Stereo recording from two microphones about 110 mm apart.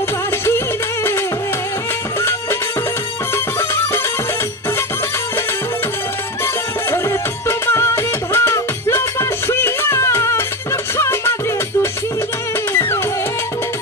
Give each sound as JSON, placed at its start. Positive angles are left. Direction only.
{"t": 3.5, "sound": "music", "side_deg": 25}
{"t": 6.4, "sound": "music", "side_deg": 25}